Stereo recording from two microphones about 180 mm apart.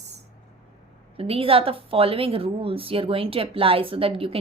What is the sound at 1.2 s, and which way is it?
A woman's voice, 30° right (ahead or behind).